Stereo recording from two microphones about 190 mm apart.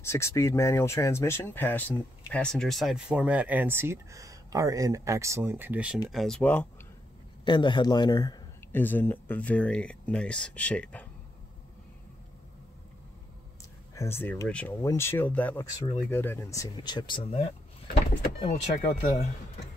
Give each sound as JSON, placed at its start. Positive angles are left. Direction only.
{"t": 0.0, "sound": "speech", "side_deg": 15}
{"t": 7.4, "sound": "speech", "side_deg": 25}
{"t": 13.9, "sound": "speech", "side_deg": 10}